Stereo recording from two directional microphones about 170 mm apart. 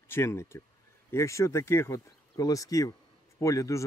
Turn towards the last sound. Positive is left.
turn(degrees=20)  # may be behind; listen again after turning